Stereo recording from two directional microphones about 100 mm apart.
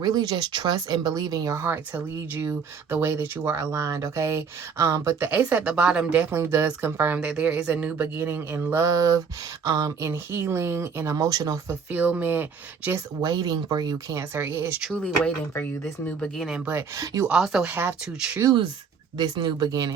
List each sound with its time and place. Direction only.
0.0 s speech: 45° right (ahead or behind)
1.6 s speech: 20° right (ahead or behind)
5.3 s speech: 15° right (ahead or behind)
6.4 s speech: 25° right (ahead or behind)
8.7 s speech: 35° right (ahead or behind)
11.7 s speech: 15° right (ahead or behind)
13.2 s speech: 40° right (ahead or behind)
14.2 s speech: 25° right (ahead or behind)
14.9 s speech: 10° left (ahead or behind); by 16.7 s 5° right (ahead or behind)
16.7 s speech: 35° right (ahead or behind)
17.2 s speech: 5° right (ahead or behind)
17.7 s speech: 20° right (ahead or behind)
19.1 s speech: 45° right (ahead or behind)